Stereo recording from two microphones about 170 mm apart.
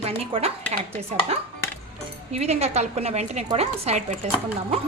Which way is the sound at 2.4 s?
40° right (ahead or behind).